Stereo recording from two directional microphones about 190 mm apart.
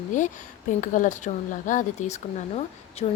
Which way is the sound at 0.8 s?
40° left (ahead or behind).